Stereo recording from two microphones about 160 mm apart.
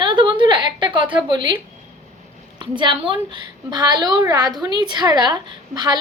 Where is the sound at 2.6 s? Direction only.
30° right (ahead or behind).